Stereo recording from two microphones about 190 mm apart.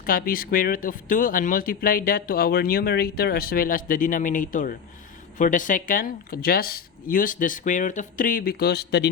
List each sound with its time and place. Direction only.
0.0 s speech: 50° left (ahead or behind)